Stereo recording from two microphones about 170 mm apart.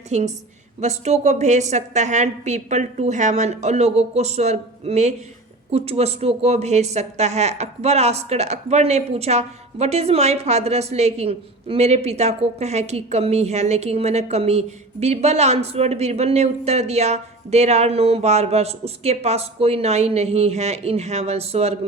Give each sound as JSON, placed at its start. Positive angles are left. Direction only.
{"t": 0.1, "sound": "a woman's voice", "side_deg": -40}